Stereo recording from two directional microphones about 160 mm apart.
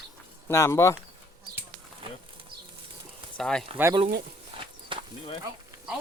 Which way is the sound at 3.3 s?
5° left (ahead or behind).